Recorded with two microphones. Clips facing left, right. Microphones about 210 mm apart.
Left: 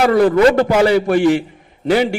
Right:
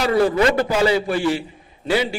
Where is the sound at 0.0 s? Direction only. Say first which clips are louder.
Left 6 dB; 55° left (ahead or behind).